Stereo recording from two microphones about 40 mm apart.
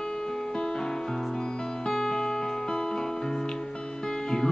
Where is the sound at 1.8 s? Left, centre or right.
Centre.